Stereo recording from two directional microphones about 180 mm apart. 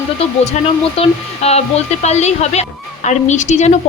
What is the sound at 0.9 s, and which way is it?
A woman's voice, 35° left (ahead or behind).